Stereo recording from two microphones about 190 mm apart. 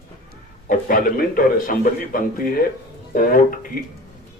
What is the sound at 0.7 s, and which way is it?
A man's voice, 45° left (ahead or behind).